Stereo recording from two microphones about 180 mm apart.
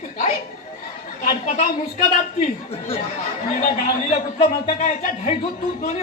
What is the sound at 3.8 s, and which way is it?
Speech, 35° left (ahead or behind).